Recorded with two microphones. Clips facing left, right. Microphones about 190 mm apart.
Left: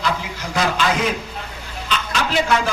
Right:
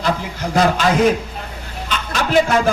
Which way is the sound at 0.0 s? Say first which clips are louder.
Right 3 dB; 50° right (ahead or behind).